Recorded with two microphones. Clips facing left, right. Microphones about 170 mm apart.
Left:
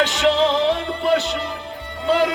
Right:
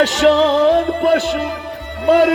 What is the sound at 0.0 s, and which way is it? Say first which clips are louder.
Music: right 5 dB; 40° right (ahead or behind).